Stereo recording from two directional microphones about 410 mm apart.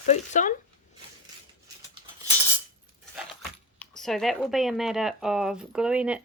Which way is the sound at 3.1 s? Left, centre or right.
Centre.